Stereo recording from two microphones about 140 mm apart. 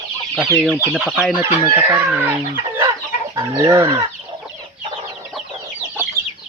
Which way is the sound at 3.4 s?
25° right (ahead or behind).